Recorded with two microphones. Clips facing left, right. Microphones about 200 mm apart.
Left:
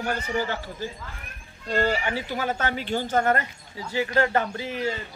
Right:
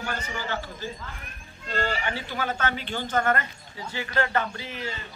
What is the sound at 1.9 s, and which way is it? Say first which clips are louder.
Speech: left 4 dB; 10° left (ahead or behind).